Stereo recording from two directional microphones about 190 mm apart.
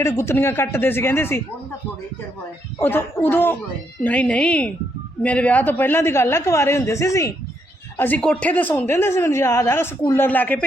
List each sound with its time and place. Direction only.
0.0 s speech: 15° left (ahead or behind)
2.7 s speech: 10° left (ahead or behind)